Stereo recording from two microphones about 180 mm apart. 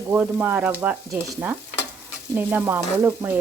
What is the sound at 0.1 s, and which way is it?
Stir, 10° right (ahead or behind).